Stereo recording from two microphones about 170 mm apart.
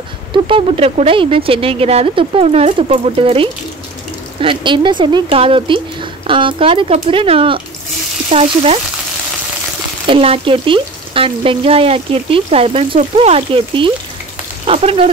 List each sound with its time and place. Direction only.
0.3 s frying: 30° right (ahead or behind)
4.4 s speech: 30° right (ahead or behind)
6.2 s frying: 30° right (ahead or behind)
10.0 s frying: 35° right (ahead or behind)